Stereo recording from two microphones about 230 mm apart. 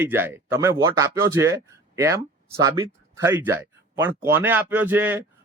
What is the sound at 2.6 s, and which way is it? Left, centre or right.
Speech, centre.